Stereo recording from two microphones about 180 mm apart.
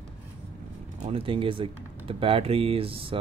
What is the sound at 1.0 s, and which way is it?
Speech, 30° right (ahead or behind).